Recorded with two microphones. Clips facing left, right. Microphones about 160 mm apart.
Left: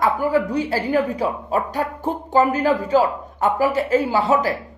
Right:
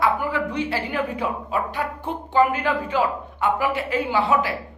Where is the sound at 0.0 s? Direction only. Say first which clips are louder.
Left 4 dB; 40° left (ahead or behind).